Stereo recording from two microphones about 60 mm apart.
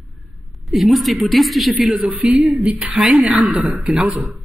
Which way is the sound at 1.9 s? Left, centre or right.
Right.